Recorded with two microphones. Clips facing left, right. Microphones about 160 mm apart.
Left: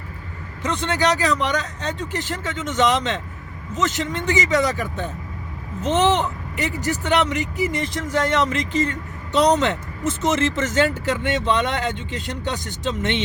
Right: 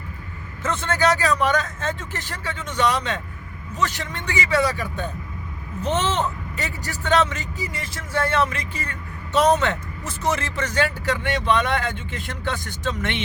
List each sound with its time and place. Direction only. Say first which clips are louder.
0.6 s speech: even; 15° left (ahead or behind)